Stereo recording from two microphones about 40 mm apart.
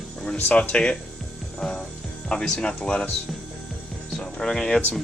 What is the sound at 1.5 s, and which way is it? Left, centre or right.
Music, left.